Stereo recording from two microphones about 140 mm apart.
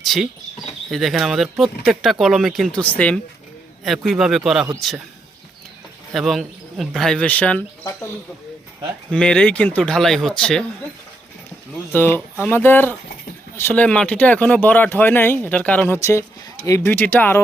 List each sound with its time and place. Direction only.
0.0 s rodents: centre (ahead or behind)
0.9 s speech: centre (ahead or behind)
6.1 s speech: centre (ahead or behind)
9.0 s speech: 5° left (ahead or behind)
11.9 s speech: 15° left (ahead or behind)